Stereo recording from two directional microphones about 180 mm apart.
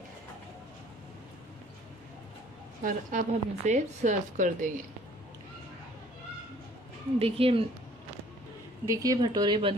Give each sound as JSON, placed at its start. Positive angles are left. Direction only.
{"t": 2.8, "sound": "speech", "side_deg": -45}
{"t": 7.2, "sound": "a woman's voice", "side_deg": -30}
{"t": 8.8, "sound": "speech", "side_deg": -20}